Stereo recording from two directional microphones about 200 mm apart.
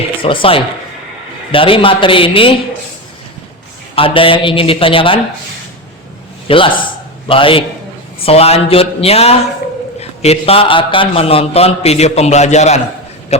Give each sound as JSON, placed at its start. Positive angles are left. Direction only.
{"t": 0.2, "sound": "a man's voice", "side_deg": 25}
{"t": 3.9, "sound": "a man's voice", "side_deg": 25}
{"t": 6.5, "sound": "a man's voice", "side_deg": 25}